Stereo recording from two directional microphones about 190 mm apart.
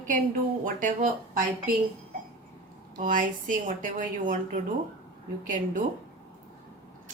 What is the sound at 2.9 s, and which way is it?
A woman's voice, 45° right (ahead or behind).